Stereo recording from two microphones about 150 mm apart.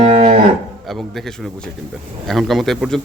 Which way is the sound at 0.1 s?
45° right (ahead or behind).